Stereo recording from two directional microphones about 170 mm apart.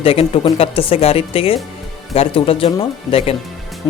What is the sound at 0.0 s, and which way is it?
Speech, 35° left (ahead or behind).